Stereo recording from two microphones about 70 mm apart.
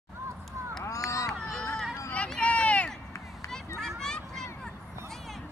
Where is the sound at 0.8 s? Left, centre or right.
Left.